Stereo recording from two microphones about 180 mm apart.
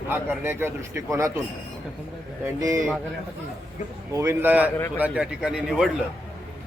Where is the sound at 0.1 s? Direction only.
10° right (ahead or behind).